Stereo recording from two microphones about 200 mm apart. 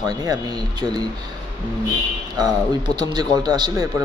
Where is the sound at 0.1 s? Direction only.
20° right (ahead or behind).